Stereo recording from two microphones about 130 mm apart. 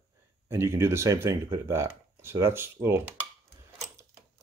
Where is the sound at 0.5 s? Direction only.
20° right (ahead or behind).